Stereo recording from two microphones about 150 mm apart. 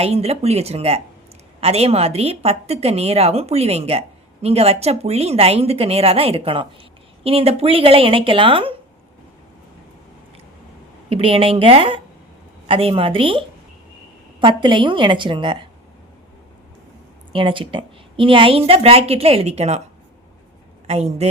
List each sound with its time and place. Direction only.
0.0 s a woman's voice: 45° right (ahead or behind)
11.1 s a woman's voice: 40° right (ahead or behind)
14.4 s a woman's voice: 30° right (ahead or behind)
17.3 s a woman's voice: 35° right (ahead or behind)
20.8 s speech: 45° right (ahead or behind)